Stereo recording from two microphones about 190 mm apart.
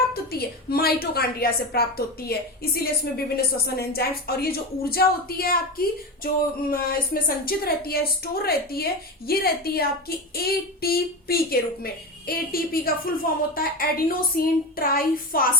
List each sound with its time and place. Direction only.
0.1 s a woman's voice: 55° left (ahead or behind)